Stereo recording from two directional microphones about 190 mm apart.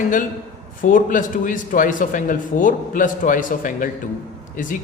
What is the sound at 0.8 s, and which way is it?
A man's voice, 45° left (ahead or behind).